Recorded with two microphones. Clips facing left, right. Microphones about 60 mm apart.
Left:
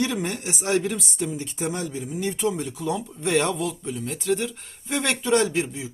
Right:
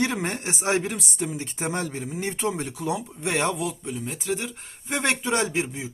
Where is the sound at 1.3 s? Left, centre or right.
Right.